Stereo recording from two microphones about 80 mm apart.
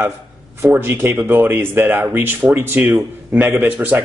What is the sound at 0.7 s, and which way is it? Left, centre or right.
Speech, right.